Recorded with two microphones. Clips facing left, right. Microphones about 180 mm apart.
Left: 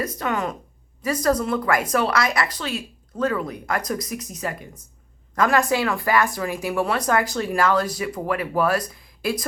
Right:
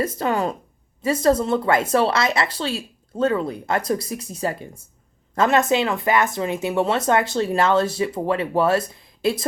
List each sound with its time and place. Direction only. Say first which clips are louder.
0.0 s speech: right 3 dB; 30° right (ahead or behind)